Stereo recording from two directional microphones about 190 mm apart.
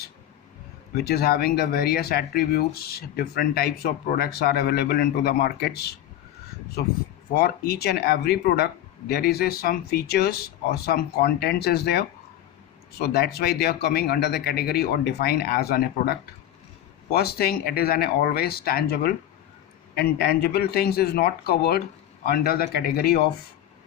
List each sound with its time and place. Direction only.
0.9 s speech: 55° left (ahead or behind)
13.1 s speech: 55° left (ahead or behind)